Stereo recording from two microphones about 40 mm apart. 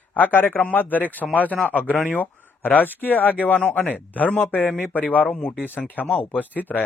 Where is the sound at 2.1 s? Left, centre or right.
Left.